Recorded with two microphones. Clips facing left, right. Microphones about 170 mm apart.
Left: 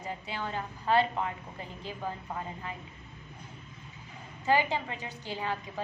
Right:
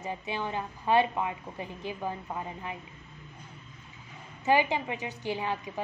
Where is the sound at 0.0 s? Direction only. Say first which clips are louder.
Right 3 dB; 20° right (ahead or behind).